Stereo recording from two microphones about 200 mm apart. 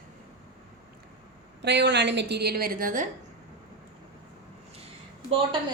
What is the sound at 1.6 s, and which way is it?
A woman's voice, 60° right (ahead or behind).